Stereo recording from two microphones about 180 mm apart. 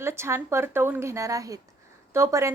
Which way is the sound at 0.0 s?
15° right (ahead or behind).